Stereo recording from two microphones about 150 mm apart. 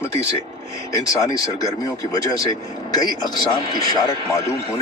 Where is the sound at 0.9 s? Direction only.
25° left (ahead or behind).